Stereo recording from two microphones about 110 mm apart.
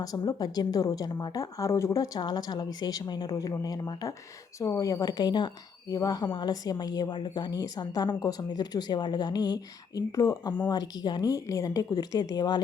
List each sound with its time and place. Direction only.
0.0 s a woman's voice: 35° left (ahead or behind)